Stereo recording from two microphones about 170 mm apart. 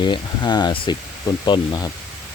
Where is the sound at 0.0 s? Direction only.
25° left (ahead or behind).